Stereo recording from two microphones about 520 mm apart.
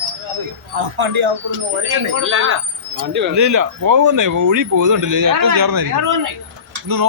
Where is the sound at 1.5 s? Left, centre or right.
Right.